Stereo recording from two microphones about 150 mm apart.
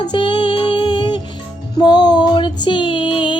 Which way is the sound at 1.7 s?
30° left (ahead or behind).